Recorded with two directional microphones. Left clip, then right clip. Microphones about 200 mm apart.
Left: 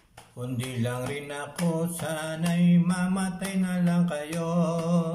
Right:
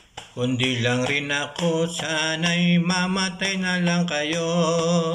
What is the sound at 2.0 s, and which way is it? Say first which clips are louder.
Mantra: right 8 dB; 20° left (ahead or behind).